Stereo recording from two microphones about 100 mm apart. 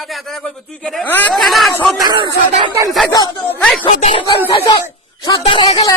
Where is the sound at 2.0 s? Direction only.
55° right (ahead or behind).